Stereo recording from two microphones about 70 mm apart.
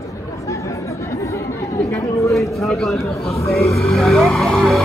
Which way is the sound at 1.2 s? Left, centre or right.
Left.